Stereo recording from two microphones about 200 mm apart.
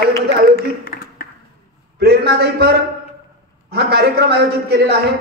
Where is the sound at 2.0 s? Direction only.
55° right (ahead or behind).